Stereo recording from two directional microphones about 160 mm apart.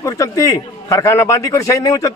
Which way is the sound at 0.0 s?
20° left (ahead or behind).